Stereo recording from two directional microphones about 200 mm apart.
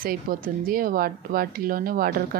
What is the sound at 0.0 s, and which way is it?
Speech, 45° right (ahead or behind).